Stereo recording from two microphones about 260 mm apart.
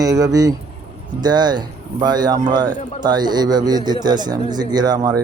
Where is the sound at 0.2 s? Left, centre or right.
Centre.